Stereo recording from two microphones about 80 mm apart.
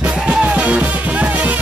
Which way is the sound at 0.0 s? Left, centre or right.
Centre.